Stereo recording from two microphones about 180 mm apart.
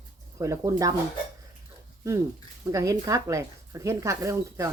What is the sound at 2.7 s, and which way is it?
Speech, 20° right (ahead or behind).